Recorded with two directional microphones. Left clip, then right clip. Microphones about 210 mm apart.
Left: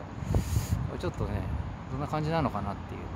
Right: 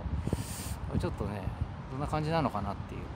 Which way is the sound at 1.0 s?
15° right (ahead or behind).